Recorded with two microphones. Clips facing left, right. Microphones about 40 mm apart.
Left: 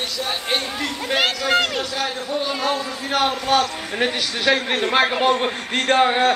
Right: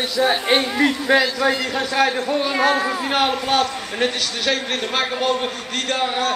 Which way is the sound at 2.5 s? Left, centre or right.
Right.